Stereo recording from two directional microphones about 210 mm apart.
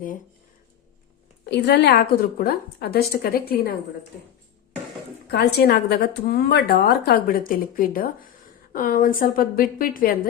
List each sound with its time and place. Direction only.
1.5 s a woman's voice: 55° left (ahead or behind)
5.3 s a woman's voice: 50° left (ahead or behind)